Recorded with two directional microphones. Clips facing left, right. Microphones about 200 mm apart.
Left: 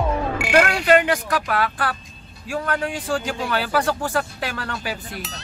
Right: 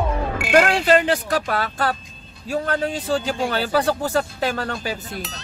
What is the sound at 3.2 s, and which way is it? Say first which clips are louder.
Speech: right 2 dB; 35° right (ahead or behind).